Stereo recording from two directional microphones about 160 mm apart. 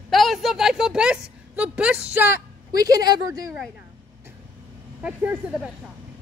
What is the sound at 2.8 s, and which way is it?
Speech, 25° right (ahead or behind).